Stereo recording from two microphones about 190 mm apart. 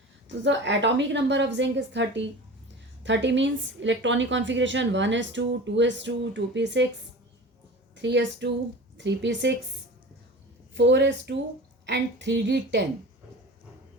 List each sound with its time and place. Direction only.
0.4 s a woman's voice: 70° right (ahead or behind)
7.9 s a woman's voice: 70° right (ahead or behind)
10.8 s a woman's voice: 70° right (ahead or behind)